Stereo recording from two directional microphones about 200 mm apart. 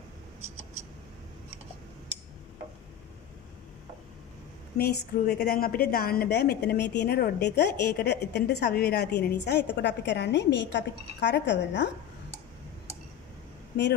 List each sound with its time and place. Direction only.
4.7 s a woman's voice: 50° left (ahead or behind)